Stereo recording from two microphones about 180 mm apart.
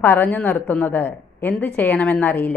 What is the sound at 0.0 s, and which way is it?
A woman's voice, 10° left (ahead or behind).